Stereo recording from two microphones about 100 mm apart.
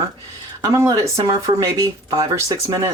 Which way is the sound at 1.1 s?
30° right (ahead or behind).